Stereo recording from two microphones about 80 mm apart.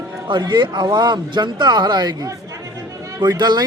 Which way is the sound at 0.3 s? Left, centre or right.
Right.